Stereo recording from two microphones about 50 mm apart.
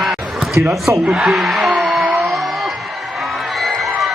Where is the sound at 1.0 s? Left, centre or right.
Right.